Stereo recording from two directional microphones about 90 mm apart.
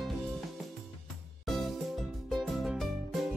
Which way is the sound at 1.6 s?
Centre (ahead or behind).